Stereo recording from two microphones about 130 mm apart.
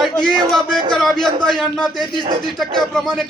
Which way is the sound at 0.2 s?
5° left (ahead or behind).